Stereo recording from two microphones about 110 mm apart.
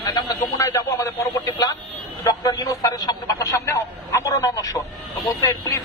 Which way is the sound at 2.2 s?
35° left (ahead or behind).